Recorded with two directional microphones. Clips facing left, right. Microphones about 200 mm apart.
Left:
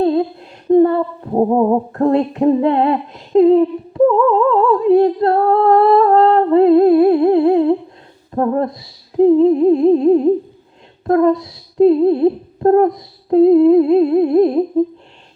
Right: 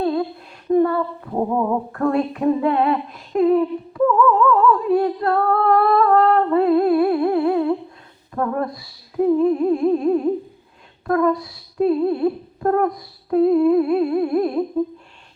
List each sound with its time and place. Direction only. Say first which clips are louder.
0.0 s humming: left 6 dB; 25° left (ahead or behind)